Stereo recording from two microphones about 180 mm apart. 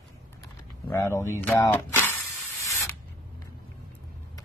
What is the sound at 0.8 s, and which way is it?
Speech, 15° left (ahead or behind).